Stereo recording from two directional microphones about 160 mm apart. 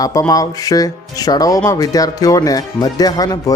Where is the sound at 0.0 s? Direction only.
20° left (ahead or behind).